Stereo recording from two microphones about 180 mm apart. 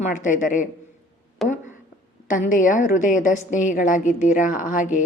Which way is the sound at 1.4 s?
45° left (ahead or behind).